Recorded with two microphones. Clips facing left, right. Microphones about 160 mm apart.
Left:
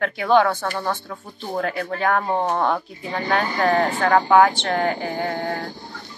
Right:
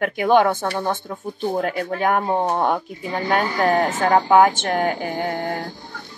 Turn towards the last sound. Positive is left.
turn(degrees=-10)  # may be behind; listen again after turning